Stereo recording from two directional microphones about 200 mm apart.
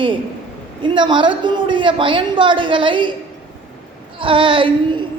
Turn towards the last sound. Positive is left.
turn(degrees=-25)  # may be behind; listen again after turning